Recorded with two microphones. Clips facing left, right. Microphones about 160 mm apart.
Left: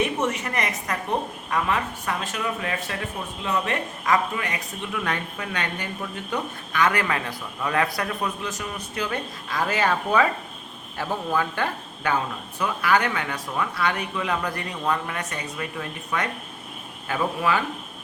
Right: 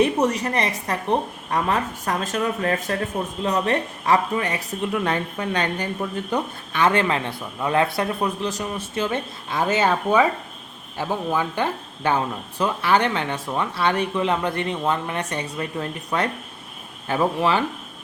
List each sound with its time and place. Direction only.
0.0 s speech: 35° right (ahead or behind); by 11.7 s 20° right (ahead or behind)
12.0 s speech: 30° right (ahead or behind)